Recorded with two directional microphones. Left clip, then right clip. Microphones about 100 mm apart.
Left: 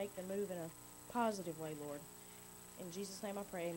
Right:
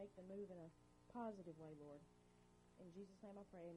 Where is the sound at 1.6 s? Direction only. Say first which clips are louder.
Left 13 dB; 30° left (ahead or behind).